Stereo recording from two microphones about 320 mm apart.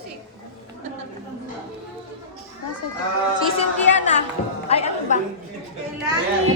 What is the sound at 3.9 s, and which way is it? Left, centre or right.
A woman's voice, left.